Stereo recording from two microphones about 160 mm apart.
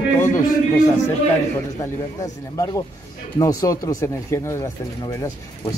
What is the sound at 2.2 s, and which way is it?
A man's voice, 20° left (ahead or behind).